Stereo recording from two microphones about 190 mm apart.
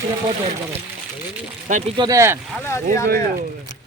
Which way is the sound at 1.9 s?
20° right (ahead or behind).